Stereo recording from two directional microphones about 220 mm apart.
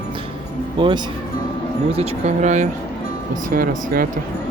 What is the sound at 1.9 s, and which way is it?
Speech, 30° right (ahead or behind).